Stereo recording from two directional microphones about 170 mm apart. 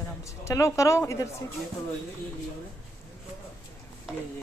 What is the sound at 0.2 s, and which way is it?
A woman's voice, 15° left (ahead or behind).